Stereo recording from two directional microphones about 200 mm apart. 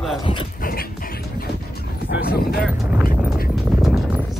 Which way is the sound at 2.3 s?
50° left (ahead or behind).